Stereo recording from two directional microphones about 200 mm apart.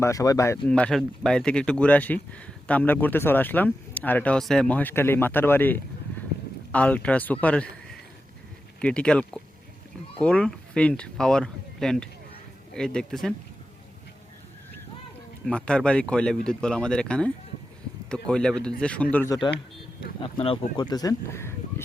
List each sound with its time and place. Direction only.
0.0 s speech: 15° left (ahead or behind)
0.7 s speech: 5° left (ahead or behind)
8.8 s speech: 5° left (ahead or behind)
15.4 s speech: 5° left (ahead or behind)
20.2 s speech: 25° left (ahead or behind)